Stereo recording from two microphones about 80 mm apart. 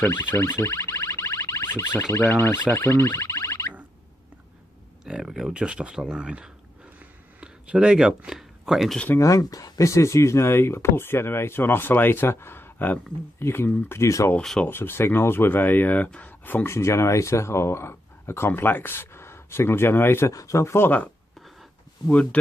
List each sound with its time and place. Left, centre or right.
0.1 s speech: left
0.3 s music: left
1.7 s speech: left
5.0 s speech: centre
7.0 s a sound: centre
9.2 s speech: left
14.0 s speech: left
14.7 s speech: left
20.3 s speech: left
22.1 s speech: centre